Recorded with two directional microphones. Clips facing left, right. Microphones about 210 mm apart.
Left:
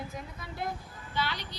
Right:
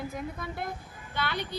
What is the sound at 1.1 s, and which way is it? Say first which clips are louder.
Speech: right 2 dB; 55° right (ahead or behind).